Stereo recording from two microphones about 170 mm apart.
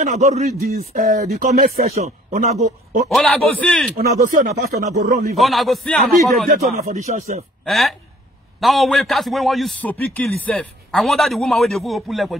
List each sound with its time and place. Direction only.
0.0 s speech: 40° right (ahead or behind)
0.6 s speech: 60° right (ahead or behind)
1.9 s a man's voice: 40° right (ahead or behind)
3.1 s a man's voice: centre (ahead or behind)
3.9 s speech: 55° right (ahead or behind)
5.4 s a man's voice: centre (ahead or behind)
6.4 s speech: 50° right (ahead or behind)
7.6 s a man's voice: centre (ahead or behind)